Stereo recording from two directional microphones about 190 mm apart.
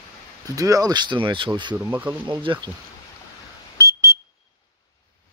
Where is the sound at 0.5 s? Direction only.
20° right (ahead or behind).